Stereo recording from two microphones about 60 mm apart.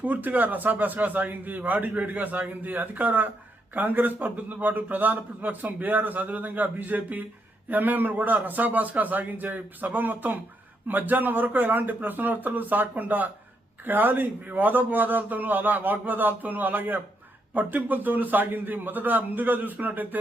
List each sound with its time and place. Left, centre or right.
0.0 s a man's voice: right